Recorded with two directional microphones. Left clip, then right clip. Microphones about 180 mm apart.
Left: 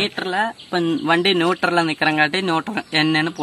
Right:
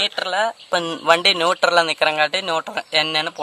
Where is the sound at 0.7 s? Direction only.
40° right (ahead or behind).